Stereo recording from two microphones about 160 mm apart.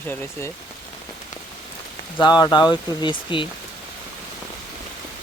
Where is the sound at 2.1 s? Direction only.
25° left (ahead or behind).